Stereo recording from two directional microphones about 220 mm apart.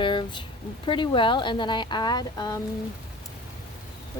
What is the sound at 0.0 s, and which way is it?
Speech, 20° left (ahead or behind).